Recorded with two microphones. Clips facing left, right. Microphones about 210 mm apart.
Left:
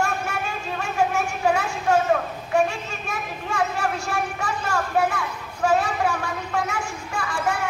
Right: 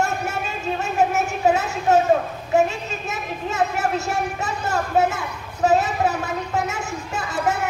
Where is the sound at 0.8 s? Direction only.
20° right (ahead or behind).